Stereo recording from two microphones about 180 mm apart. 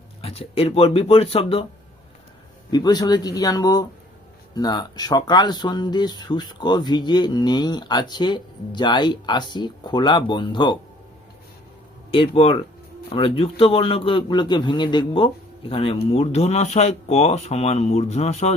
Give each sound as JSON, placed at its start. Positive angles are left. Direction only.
{"t": 0.2, "sound": "speech", "side_deg": 35}
{"t": 2.6, "sound": "speech", "side_deg": 20}
{"t": 12.1, "sound": "speech", "side_deg": 30}